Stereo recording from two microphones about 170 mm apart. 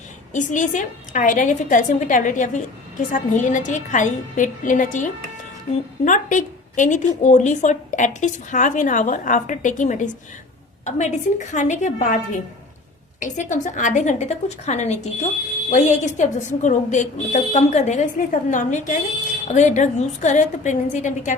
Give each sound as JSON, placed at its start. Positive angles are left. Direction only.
{"t": 0.3, "sound": "a woman's voice", "side_deg": 45}
{"t": 13.1, "sound": "a woman's voice", "side_deg": 45}